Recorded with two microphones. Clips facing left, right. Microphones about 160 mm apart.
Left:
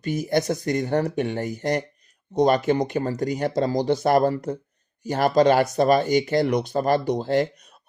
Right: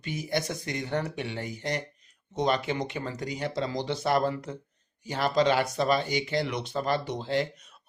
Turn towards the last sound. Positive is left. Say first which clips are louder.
# left 7 dB
turn(degrees=40)  # may be behind; listen again after turning